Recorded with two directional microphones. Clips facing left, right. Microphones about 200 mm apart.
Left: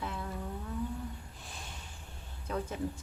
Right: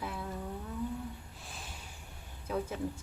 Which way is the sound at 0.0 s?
10° right (ahead or behind).